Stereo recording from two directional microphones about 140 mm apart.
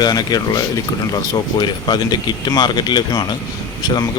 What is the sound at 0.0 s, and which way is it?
Speech, 30° left (ahead or behind).